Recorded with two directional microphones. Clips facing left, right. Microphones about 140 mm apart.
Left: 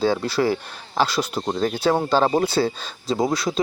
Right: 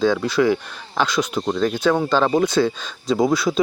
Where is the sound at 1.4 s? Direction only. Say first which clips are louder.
Right 2 dB; 25° left (ahead or behind).